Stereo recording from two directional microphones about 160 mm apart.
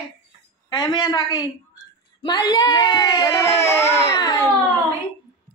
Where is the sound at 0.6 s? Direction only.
30° left (ahead or behind).